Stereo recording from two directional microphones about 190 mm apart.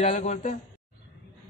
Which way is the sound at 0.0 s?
40° left (ahead or behind).